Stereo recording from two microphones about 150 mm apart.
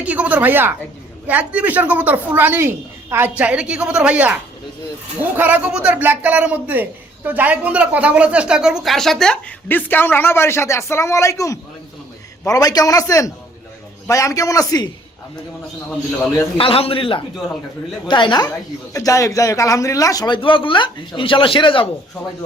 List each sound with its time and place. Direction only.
0.0 s a woman's voice: 10° right (ahead or behind); by 14.8 s 25° left (ahead or behind)
16.6 s a man's voice: 40° left (ahead or behind)